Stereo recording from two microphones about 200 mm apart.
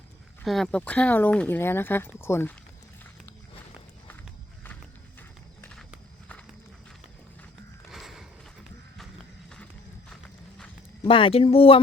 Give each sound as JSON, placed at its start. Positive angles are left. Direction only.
{"t": 0.4, "sound": "speech", "side_deg": 0}
{"t": 7.9, "sound": "horse", "side_deg": 0}
{"t": 11.1, "sound": "speech", "side_deg": 25}